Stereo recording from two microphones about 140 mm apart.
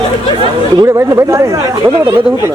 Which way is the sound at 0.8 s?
20° right (ahead or behind).